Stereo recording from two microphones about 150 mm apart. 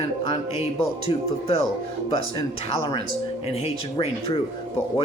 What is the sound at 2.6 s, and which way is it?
Speech, 35° left (ahead or behind).